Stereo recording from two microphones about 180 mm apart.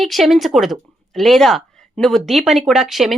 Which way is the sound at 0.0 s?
Centre (ahead or behind).